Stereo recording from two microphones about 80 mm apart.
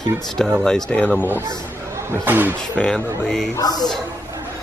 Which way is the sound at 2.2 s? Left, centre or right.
Right.